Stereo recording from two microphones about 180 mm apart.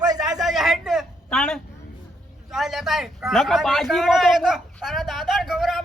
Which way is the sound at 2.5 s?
Centre (ahead or behind).